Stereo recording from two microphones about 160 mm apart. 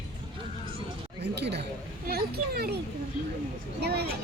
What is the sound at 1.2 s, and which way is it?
Chatter, 90° right.